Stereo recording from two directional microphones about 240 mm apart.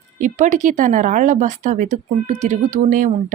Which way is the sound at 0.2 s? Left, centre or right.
Right.